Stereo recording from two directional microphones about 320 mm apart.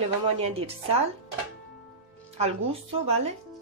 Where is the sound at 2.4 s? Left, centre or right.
Centre.